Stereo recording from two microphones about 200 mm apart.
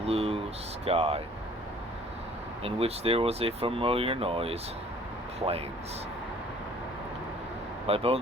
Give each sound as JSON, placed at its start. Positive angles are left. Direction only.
{"t": 0.0, "sound": "a sound", "side_deg": -30}
{"t": 0.9, "sound": "speech", "side_deg": -30}
{"t": 2.6, "sound": "speech", "side_deg": -30}
{"t": 7.9, "sound": "speech", "side_deg": -30}